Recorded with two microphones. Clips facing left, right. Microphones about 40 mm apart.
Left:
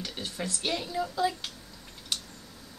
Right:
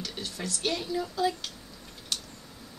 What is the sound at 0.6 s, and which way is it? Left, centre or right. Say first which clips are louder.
Speech: right 1 dB; centre.